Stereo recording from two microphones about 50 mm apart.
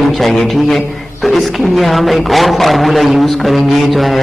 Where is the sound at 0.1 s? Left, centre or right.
Centre.